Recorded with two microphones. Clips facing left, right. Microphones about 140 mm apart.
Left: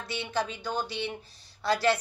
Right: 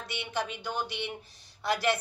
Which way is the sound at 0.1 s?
20° right (ahead or behind).